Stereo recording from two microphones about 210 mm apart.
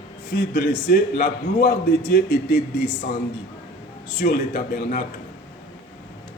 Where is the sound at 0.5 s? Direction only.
45° left (ahead or behind).